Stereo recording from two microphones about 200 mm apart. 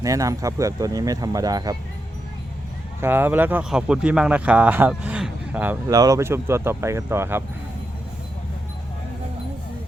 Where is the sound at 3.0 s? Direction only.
10° right (ahead or behind).